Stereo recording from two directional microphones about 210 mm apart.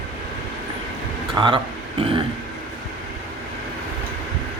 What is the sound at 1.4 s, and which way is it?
Speech, 20° right (ahead or behind).